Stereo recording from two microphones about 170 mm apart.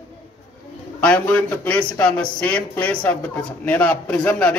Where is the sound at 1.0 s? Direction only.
5° left (ahead or behind).